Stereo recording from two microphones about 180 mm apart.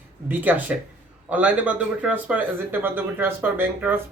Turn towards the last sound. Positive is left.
turn(degrees=-10)  # may be behind; listen again after turning